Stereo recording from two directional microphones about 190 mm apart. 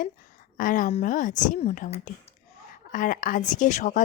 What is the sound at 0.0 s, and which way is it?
A woman's voice, 45° left (ahead or behind).